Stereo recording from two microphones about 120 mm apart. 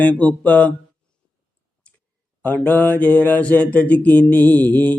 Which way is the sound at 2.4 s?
15° left (ahead or behind).